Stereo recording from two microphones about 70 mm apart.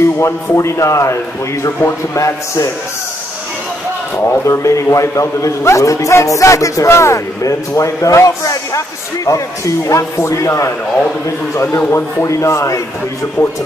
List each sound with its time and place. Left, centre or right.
0.0 s a man's voice: left
4.5 s a man's voice: left